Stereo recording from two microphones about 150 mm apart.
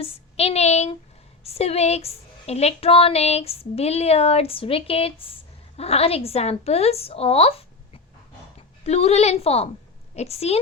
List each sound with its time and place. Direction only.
0.0 s child singing: 45° left (ahead or behind)
1.5 s a woman's voice: 45° left (ahead or behind)